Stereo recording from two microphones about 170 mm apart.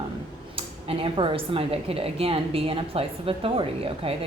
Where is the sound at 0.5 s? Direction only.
30° right (ahead or behind).